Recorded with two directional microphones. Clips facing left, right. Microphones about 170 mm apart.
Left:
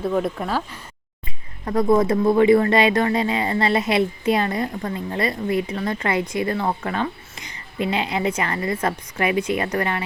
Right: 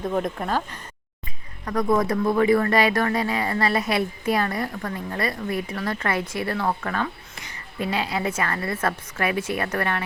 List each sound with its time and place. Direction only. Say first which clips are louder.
0.0 s speech: left 3 dB; 5° left (ahead or behind)
1.6 s a woman's voice: left 4 dB; 25° left (ahead or behind)